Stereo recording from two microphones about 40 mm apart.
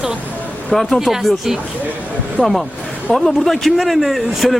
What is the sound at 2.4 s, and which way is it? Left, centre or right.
Speech, left.